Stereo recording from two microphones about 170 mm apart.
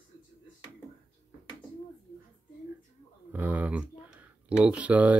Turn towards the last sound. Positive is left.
turn(degrees=-10)  # may be behind; listen again after turning